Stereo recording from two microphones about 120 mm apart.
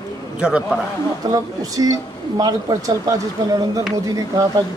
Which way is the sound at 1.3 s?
30° right (ahead or behind).